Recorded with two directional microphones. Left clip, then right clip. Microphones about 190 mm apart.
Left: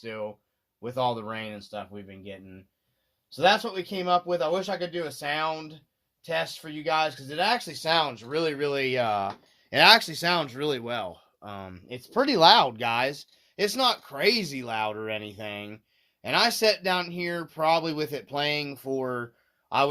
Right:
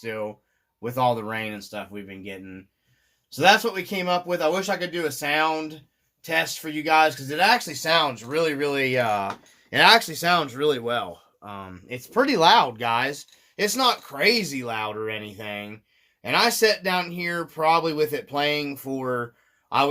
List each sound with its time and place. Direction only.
0.0 s speech: 30° left (ahead or behind)
9.7 s speech: 50° left (ahead or behind)
11.7 s speech: 30° left (ahead or behind); by 19.9 s 45° left (ahead or behind)